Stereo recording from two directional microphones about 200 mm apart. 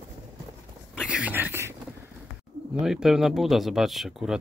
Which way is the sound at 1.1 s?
10° right (ahead or behind).